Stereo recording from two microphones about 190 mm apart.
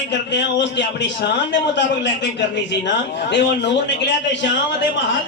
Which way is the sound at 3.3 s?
70° left (ahead or behind).